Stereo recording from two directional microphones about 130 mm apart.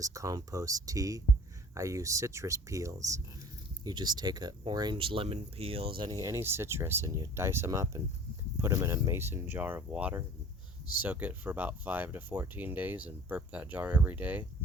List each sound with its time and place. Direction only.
0.0 s speech: 25° right (ahead or behind); by 6.1 s 45° right (ahead or behind)
6.1 s speech: 30° right (ahead or behind); by 14.4 s 10° right (ahead or behind)